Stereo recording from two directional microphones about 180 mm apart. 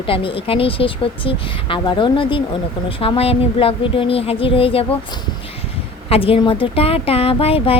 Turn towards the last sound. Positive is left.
turn(degrees=30)  # may be behind; listen again after turning